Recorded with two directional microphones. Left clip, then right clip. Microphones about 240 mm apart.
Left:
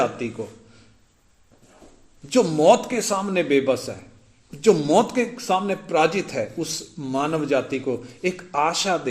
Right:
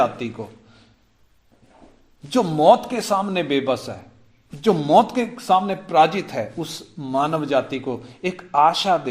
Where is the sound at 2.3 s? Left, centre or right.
Centre.